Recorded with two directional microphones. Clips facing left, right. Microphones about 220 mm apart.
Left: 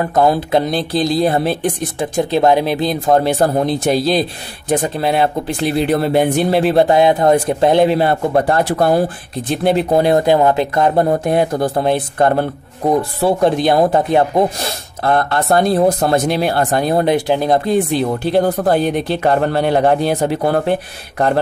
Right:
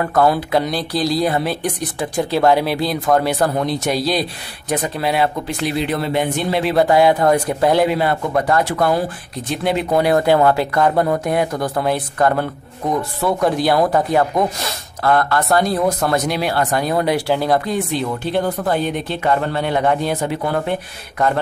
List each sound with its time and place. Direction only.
0.0 s speech: 20° left (ahead or behind)
5.9 s speech: 50° left (ahead or behind); by 17.6 s 20° left (ahead or behind)
17.6 s speech: 30° left (ahead or behind)